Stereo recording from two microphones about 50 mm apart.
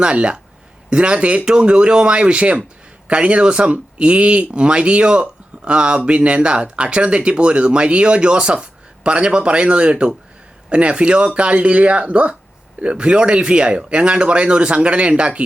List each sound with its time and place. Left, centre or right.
0.0 s speech: right